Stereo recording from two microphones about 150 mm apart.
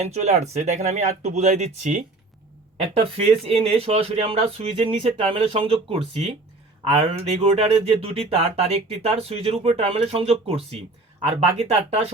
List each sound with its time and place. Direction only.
0.0 s speech: 50° right (ahead or behind)
3.0 s speech: 40° right (ahead or behind)